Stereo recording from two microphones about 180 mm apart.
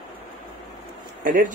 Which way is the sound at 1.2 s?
50° right (ahead or behind).